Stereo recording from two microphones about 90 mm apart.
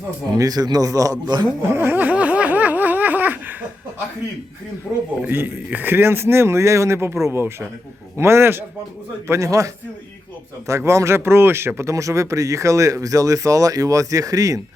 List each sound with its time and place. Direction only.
0.3 s a man's voice: 40° right (ahead or behind)
1.6 s a sound: 30° right (ahead or behind)
5.3 s speech: 25° right (ahead or behind); by 14.6 s 40° right (ahead or behind)